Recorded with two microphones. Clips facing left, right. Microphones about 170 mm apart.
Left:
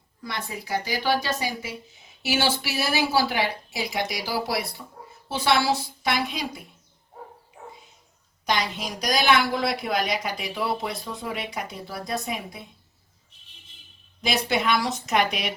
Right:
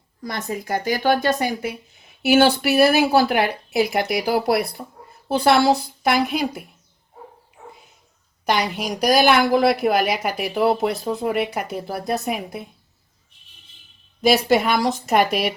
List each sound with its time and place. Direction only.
0.2 s speech: 45° right (ahead or behind); by 6.7 s 60° right (ahead or behind)
7.6 s dog: 45° left (ahead or behind)
8.4 s speech: 60° right (ahead or behind)
14.2 s a woman's voice: 55° right (ahead or behind)
14.4 s a woman's voice: 40° right (ahead or behind)
15.2 s a woman's voice: 5° right (ahead or behind)